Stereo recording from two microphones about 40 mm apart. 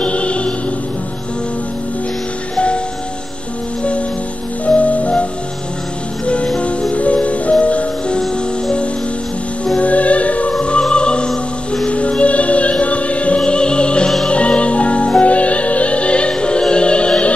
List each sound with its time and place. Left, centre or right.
0.0 s music: left
2.5 s music: left
4.6 s music: left
6.2 s music: left
9.8 s music: left
13.4 s opera: left
14.2 s music: left